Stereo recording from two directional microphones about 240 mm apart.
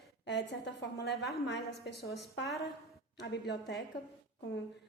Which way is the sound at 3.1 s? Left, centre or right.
Left.